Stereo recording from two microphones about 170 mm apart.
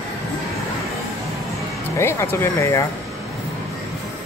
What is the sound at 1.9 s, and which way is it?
Speech, 15° left (ahead or behind).